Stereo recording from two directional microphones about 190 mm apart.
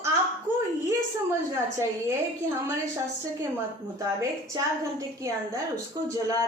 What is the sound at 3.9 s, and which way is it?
A woman's voice, 15° right (ahead or behind).